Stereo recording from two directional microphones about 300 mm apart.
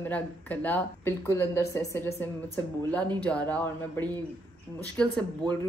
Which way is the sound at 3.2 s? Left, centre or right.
Centre.